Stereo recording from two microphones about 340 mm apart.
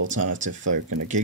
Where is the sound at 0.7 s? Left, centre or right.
Right.